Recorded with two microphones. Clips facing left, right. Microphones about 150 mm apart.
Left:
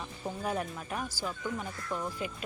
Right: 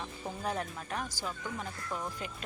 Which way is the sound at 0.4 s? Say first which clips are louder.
Left 1 dB; 5° left (ahead or behind).